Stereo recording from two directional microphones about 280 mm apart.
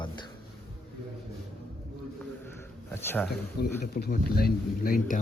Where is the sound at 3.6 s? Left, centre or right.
Left.